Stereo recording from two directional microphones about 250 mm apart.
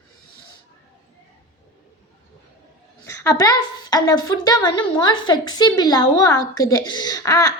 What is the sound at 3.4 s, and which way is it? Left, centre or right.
A woman's voice, centre.